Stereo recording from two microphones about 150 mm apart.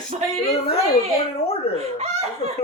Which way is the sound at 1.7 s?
45° right (ahead or behind).